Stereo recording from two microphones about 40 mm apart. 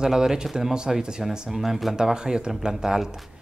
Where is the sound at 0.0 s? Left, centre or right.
Centre.